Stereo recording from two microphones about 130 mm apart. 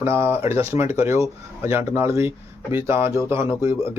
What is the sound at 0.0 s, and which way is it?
Speech, 20° right (ahead or behind).